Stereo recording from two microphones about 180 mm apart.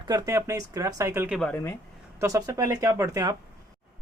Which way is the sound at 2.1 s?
15° right (ahead or behind).